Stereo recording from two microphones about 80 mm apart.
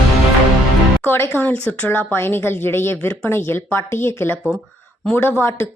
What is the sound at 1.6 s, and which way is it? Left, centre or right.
A woman's voice, centre.